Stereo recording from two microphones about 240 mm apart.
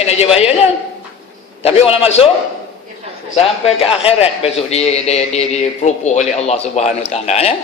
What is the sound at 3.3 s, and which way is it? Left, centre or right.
A man's voice, left.